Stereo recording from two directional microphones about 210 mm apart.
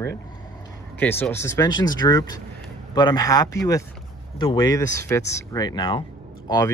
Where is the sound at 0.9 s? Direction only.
10° left (ahead or behind).